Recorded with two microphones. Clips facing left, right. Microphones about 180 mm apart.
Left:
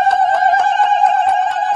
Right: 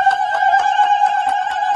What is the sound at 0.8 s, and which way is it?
Music, 55° left (ahead or behind).